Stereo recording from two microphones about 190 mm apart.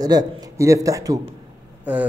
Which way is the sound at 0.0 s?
20° right (ahead or behind).